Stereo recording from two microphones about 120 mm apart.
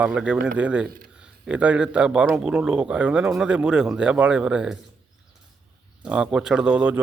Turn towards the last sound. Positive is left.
turn(degrees=-10)  # may be behind; listen again after turning